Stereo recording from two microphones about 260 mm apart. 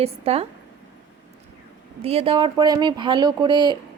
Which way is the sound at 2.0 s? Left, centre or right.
Right.